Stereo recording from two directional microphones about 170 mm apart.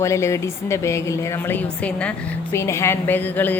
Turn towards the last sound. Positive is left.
turn(degrees=10)  # may be behind; listen again after turning